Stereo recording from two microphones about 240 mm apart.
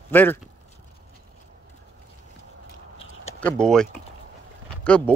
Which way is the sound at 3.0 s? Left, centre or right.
Left.